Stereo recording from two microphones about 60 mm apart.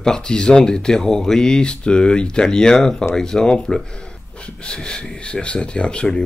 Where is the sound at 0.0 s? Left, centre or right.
Centre.